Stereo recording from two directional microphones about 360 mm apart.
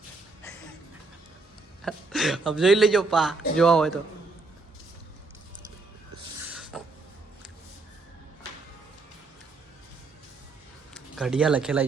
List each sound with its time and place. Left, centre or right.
1.8 s speech: centre
6.5 s a sound: centre
10.9 s speech: centre